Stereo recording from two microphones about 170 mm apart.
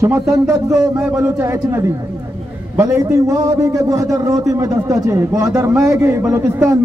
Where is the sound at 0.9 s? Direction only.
5° right (ahead or behind).